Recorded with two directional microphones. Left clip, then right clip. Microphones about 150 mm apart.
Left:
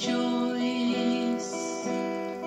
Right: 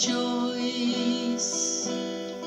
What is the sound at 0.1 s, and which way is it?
Music, 45° right (ahead or behind).